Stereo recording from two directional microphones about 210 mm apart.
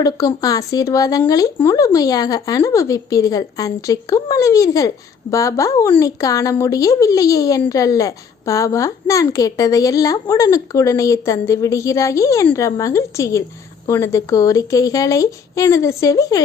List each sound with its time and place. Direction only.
0.0 s a woman's voice: 15° left (ahead or behind)